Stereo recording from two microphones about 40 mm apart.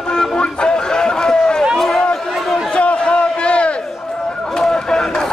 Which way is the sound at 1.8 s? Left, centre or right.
Centre.